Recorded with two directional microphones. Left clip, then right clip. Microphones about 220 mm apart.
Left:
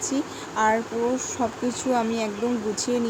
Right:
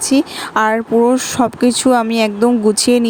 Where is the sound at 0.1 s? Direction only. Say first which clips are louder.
Right 13 dB; 45° right (ahead or behind).